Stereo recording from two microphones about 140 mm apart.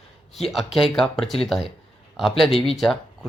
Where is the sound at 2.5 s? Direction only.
40° left (ahead or behind).